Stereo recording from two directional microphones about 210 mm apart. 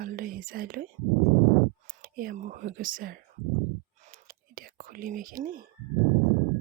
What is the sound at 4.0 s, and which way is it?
Whispering, 40° right (ahead or behind).